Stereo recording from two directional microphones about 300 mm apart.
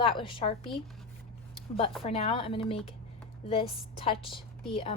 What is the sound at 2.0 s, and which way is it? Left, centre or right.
A woman's voice, centre.